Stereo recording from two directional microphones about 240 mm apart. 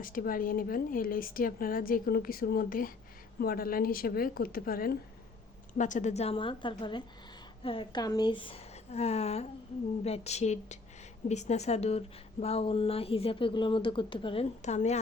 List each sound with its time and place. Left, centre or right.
0.0 s a woman's voice: left